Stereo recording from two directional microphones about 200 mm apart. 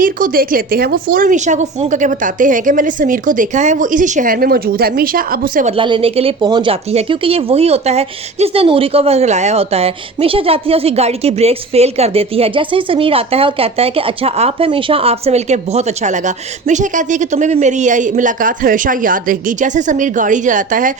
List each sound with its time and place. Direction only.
0.0 s a woman's voice: 45° right (ahead or behind)
5.7 s speech: 25° right (ahead or behind); by 20.9 s 40° right (ahead or behind)